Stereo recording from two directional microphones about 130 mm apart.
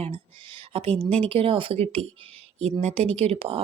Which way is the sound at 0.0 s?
50° right (ahead or behind).